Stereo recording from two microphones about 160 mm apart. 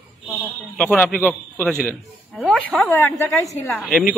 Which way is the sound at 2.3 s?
Centre (ahead or behind).